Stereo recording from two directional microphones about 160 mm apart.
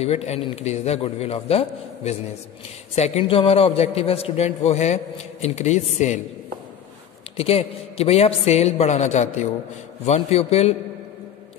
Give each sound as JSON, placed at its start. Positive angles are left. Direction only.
{"t": 0.0, "sound": "a man's voice", "side_deg": 40}
{"t": 7.3, "sound": "a man's voice", "side_deg": 40}